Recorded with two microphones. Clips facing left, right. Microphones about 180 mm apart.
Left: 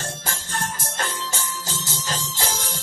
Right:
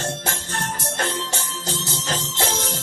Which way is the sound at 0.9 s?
60° right (ahead or behind).